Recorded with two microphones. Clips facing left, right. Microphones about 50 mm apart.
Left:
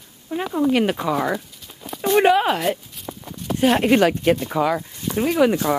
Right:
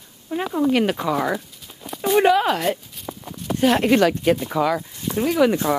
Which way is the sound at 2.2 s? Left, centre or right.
Centre.